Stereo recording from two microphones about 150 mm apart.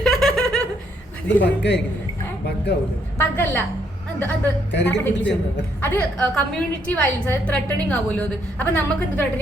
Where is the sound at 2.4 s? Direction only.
90° left.